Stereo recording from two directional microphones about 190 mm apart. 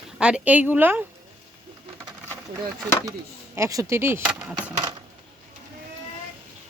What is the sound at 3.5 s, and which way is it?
Speech, 15° right (ahead or behind).